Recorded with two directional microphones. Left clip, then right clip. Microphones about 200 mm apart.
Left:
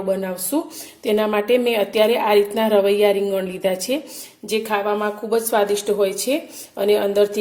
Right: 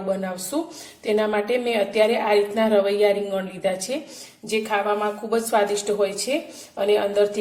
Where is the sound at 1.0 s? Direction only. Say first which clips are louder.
Left 3 dB; 35° left (ahead or behind).